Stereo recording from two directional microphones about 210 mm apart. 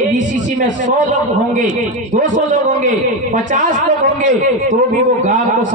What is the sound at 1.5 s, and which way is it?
A man's voice, 40° right (ahead or behind).